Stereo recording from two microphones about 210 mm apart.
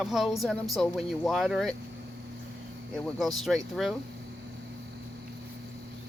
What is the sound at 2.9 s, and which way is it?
Speech, centre (ahead or behind).